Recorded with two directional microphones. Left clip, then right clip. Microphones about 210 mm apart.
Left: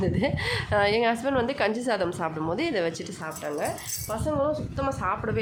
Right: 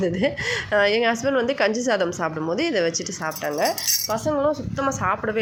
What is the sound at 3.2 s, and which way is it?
A woman's voice, 20° right (ahead or behind).